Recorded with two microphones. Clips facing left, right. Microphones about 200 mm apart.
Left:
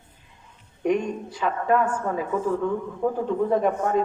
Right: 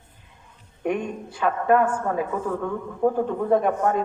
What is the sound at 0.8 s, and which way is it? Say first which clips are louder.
Speech: left 2 dB; 55° right (ahead or behind).